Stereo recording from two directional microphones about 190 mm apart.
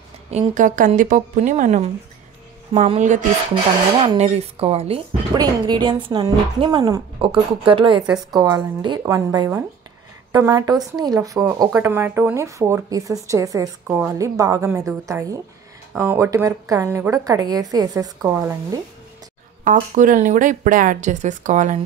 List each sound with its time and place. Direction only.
0.3 s a woman's voice: 40° right (ahead or behind); by 18.8 s 15° right (ahead or behind)
19.6 s speech: 45° right (ahead or behind)